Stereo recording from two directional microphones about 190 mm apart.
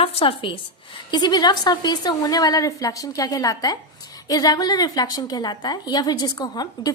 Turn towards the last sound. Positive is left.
turn(degrees=20)  # may be behind; listen again after turning